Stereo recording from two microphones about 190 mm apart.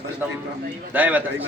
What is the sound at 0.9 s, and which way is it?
Speech, 10° right (ahead or behind).